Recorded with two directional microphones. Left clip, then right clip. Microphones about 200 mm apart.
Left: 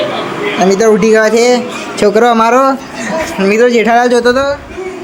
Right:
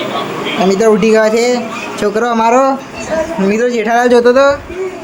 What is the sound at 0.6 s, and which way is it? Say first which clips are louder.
Speech: left 2 dB; 5° left (ahead or behind).